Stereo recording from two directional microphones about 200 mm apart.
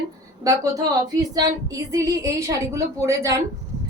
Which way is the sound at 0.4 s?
15° right (ahead or behind).